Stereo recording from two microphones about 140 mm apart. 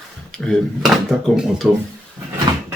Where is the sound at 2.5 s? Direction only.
30° right (ahead or behind).